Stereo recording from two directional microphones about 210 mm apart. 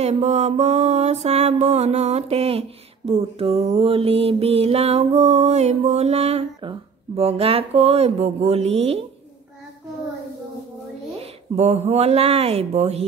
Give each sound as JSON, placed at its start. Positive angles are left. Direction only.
{"t": 0.0, "sound": "mantra", "side_deg": -30}
{"t": 11.1, "sound": "speech", "side_deg": -30}